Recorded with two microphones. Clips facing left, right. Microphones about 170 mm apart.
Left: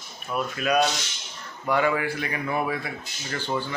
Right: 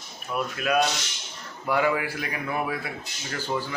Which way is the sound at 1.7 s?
5° right (ahead or behind).